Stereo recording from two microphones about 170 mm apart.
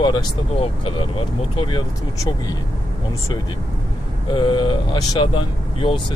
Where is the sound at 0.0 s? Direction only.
25° left (ahead or behind).